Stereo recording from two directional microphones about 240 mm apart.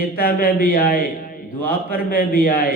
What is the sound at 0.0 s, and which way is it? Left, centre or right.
A man's voice, left.